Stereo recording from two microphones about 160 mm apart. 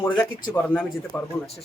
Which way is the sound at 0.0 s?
10° left (ahead or behind).